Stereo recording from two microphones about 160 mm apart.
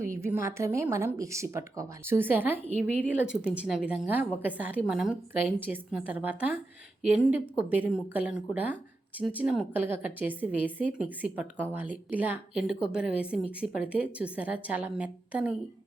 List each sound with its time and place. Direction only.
0.0 s a woman's voice: 15° right (ahead or behind)